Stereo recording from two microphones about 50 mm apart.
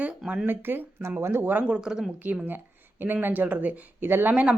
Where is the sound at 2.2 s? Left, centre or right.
Right.